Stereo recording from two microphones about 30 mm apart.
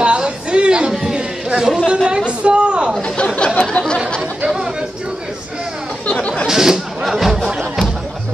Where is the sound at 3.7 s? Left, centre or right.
Left.